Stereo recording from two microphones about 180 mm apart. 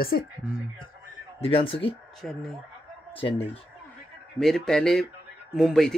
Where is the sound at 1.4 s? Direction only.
30° left (ahead or behind).